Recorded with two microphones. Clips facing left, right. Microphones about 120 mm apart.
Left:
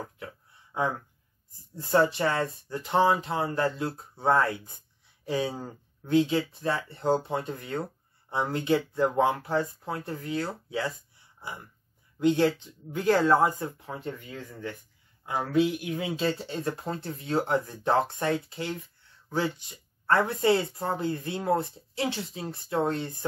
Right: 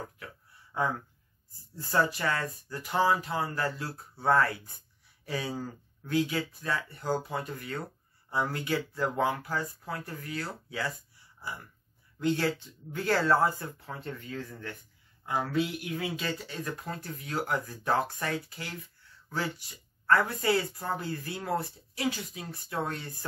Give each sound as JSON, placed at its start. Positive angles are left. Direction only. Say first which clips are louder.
{"t": 0.7, "sound": "speech", "louder": "left 2 dB", "side_deg": 20}